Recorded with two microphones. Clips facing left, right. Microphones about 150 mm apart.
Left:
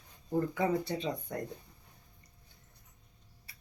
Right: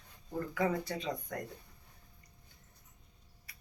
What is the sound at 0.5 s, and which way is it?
Speech, 25° left (ahead or behind).